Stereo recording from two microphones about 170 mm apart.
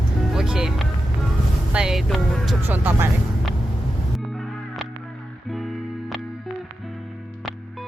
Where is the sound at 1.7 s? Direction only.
5° right (ahead or behind).